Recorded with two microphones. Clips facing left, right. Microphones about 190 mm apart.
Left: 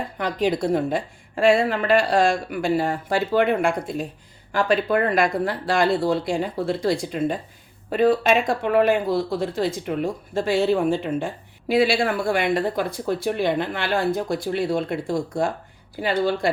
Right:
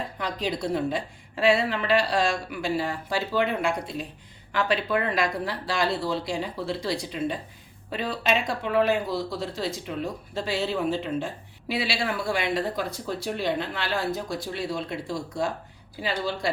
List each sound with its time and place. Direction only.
0.2 s speech: 55° left (ahead or behind)